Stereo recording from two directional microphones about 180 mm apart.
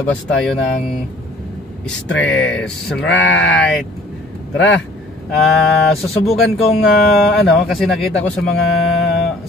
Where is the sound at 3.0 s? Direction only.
85° left.